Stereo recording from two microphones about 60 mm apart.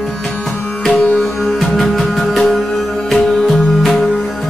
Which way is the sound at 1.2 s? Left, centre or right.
Centre.